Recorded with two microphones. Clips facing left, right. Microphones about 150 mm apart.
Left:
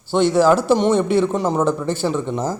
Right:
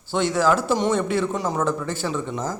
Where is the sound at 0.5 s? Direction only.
65° left (ahead or behind).